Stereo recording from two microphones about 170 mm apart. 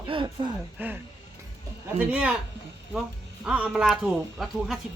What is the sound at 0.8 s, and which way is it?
Speech, 10° right (ahead or behind).